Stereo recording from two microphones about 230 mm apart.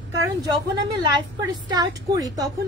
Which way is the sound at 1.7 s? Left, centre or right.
Centre.